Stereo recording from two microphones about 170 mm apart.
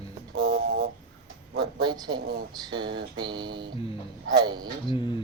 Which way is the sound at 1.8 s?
25° right (ahead or behind).